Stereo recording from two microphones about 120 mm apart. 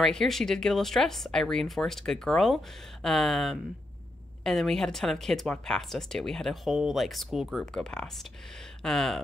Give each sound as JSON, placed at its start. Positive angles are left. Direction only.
{"t": 0.0, "sound": "speech", "side_deg": 5}